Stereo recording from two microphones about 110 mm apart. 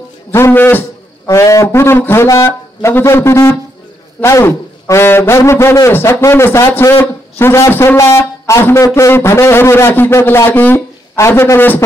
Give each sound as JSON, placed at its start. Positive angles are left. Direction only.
{"t": 0.3, "sound": "a man's voice", "side_deg": 20}
{"t": 1.2, "sound": "a man's voice", "side_deg": 30}